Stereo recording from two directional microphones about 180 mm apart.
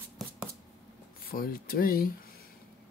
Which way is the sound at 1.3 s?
55° left (ahead or behind).